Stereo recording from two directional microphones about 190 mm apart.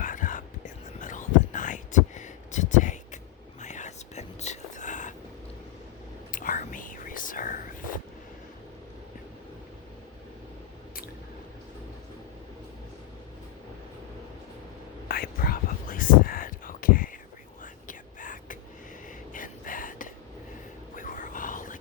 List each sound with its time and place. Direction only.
0.0 s whispering: 45° left (ahead or behind)
6.3 s whispering: 45° left (ahead or behind)
15.0 s whispering: 50° left (ahead or behind)
19.0 s a sound: 45° left (ahead or behind)